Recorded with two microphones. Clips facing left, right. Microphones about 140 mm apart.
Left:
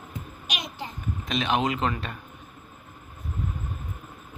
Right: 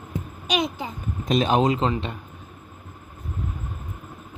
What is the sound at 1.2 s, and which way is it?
Speech, 40° right (ahead or behind).